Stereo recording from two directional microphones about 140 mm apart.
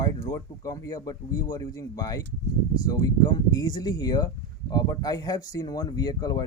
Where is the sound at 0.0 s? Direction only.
25° left (ahead or behind).